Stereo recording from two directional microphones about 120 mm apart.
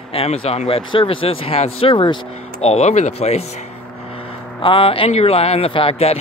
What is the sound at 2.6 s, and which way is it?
Speech, 60° left (ahead or behind).